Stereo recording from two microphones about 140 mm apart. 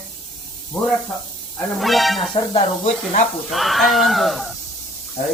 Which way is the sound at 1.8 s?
Centre (ahead or behind).